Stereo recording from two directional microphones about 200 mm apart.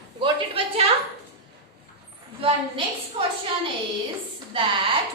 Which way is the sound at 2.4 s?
25° right (ahead or behind).